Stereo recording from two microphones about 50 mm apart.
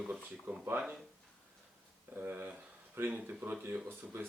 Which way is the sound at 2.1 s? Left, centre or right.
Right.